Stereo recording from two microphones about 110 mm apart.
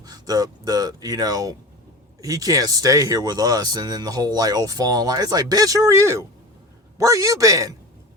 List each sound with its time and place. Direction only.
0.0 s speech: 35° right (ahead or behind)